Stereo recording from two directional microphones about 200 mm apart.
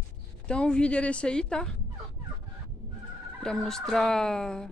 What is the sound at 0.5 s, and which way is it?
Speech, 5° left (ahead or behind).